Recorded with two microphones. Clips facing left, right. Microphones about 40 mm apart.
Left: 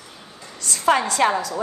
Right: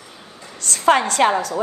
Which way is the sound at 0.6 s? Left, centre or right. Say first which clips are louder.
Right 3 dB; right.